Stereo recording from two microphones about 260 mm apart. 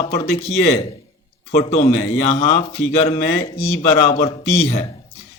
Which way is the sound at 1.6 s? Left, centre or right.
Left.